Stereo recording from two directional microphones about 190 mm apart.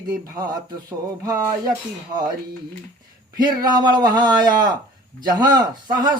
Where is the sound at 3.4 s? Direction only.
20° right (ahead or behind).